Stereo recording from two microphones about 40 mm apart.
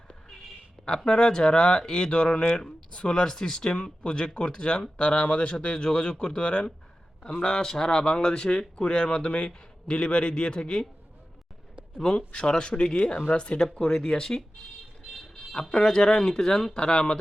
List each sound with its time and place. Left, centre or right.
0.9 s speech: left
12.1 s speech: left
15.7 s speech: centre